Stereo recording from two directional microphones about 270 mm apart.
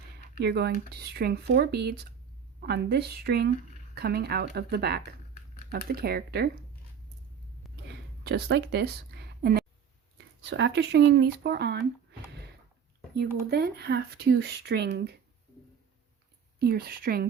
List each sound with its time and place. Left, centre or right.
0.3 s speech: right
8.2 s speech: right
13.1 s speech: right
16.6 s speech: right